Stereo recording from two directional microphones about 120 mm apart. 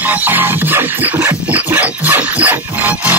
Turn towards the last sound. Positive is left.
turn(degrees=-15)  # may be behind; listen again after turning